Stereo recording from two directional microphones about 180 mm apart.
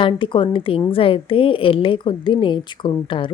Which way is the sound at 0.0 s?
25° left (ahead or behind).